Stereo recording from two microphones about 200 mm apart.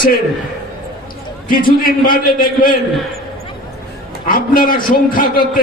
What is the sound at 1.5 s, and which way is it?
A man's voice, 45° left (ahead or behind).